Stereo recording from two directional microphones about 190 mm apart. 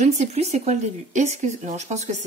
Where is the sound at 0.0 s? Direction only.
35° right (ahead or behind).